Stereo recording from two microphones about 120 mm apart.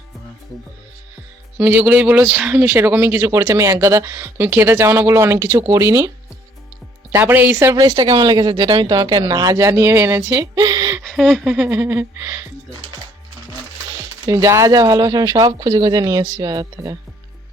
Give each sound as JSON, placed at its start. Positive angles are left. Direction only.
{"t": 1.5, "sound": "speech", "side_deg": -15}
{"t": 7.1, "sound": "speech", "side_deg": -20}
{"t": 7.8, "sound": "speech", "side_deg": -35}
{"t": 11.0, "sound": "a sound", "side_deg": -5}
{"t": 14.3, "sound": "speech", "side_deg": -25}